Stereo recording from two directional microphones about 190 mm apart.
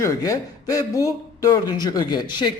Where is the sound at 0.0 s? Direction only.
15° left (ahead or behind).